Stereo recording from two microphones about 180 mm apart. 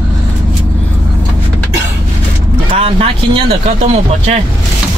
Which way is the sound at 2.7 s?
30° right (ahead or behind).